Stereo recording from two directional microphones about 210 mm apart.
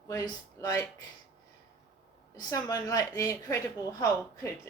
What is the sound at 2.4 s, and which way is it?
A woman's voice, 15° left (ahead or behind).